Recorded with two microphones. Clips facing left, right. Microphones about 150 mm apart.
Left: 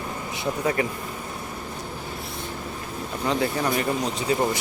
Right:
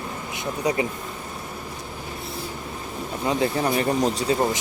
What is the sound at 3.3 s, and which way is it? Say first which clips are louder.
Speech: right 2 dB; 20° right (ahead or behind).